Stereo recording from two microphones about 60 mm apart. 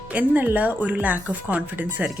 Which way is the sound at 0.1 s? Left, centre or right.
Right.